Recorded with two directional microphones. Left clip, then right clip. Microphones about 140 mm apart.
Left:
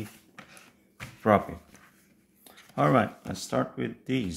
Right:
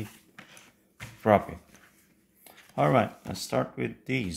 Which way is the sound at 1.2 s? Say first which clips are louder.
Right 1 dB; 5° right (ahead or behind).